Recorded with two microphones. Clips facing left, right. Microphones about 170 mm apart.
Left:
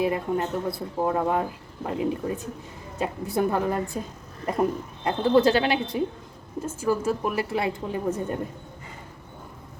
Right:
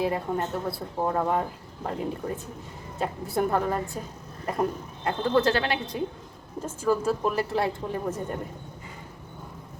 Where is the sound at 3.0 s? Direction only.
15° left (ahead or behind).